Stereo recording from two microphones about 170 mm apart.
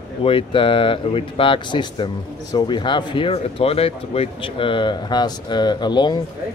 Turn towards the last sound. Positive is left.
turn(degrees=25)  # may be behind; listen again after turning